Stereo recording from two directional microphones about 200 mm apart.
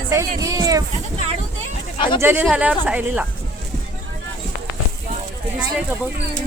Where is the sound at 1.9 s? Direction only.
25° left (ahead or behind).